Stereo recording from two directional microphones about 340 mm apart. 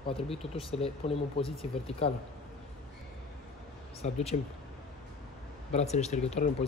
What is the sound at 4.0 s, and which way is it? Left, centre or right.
Speech, centre.